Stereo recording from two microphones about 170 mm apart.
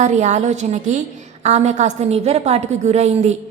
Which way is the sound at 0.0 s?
45° right (ahead or behind).